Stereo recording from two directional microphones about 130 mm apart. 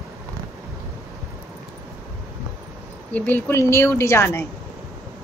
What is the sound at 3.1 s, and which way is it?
A woman's voice, 15° left (ahead or behind).